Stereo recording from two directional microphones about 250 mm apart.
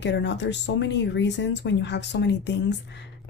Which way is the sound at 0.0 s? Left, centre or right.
Left.